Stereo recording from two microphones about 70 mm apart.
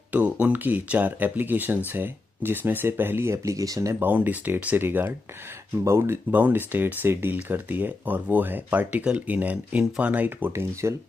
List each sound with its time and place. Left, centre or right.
0.1 s speech: right
4.0 s speech: right
6.3 s speech: right
10.5 s speech: right